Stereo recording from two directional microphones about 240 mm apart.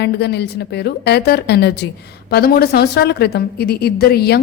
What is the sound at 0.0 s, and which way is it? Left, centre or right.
A woman's voice, left.